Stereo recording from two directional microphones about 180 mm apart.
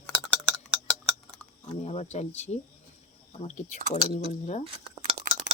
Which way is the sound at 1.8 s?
35° left (ahead or behind).